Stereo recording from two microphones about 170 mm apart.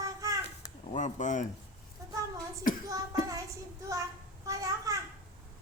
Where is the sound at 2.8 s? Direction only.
20° right (ahead or behind).